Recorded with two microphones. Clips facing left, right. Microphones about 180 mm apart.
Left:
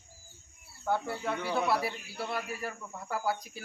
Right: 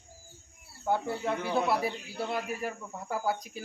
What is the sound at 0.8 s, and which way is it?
Speech, 15° right (ahead or behind).